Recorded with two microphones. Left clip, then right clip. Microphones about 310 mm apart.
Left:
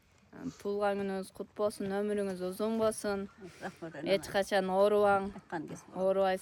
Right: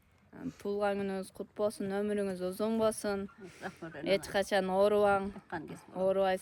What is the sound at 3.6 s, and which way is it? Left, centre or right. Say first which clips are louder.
Speech: left 1 dB; left.